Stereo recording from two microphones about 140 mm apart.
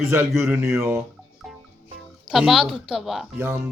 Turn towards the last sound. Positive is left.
turn(degrees=-20)  # may be behind; listen again after turning